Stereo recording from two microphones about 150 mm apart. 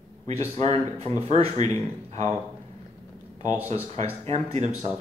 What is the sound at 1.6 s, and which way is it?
Speech, 20° left (ahead or behind).